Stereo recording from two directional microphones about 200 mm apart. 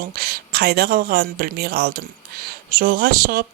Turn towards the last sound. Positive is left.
turn(degrees=-50)  # may be behind; listen again after turning